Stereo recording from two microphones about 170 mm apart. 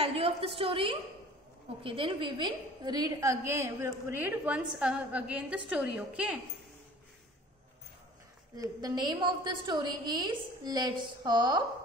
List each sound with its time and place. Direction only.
0.0 s a woman's voice: 35° right (ahead or behind); by 6.4 s 5° right (ahead or behind)
8.5 s a woman's voice: 25° right (ahead or behind)